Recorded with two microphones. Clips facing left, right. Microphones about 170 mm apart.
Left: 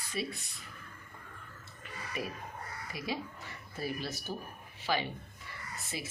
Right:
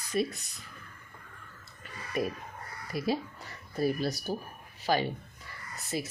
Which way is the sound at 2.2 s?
45° right (ahead or behind).